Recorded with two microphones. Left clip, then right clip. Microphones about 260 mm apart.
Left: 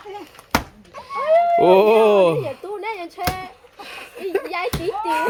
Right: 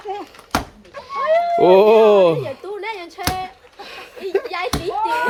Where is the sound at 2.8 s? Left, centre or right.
Left.